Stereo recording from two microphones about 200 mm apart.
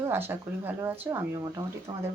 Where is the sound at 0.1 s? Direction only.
10° right (ahead or behind).